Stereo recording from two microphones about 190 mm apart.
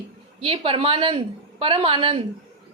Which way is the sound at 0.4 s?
30° right (ahead or behind).